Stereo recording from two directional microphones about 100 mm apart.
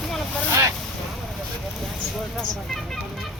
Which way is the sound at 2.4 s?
5° left (ahead or behind).